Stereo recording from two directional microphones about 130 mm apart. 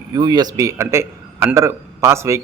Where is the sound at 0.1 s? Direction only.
35° right (ahead or behind).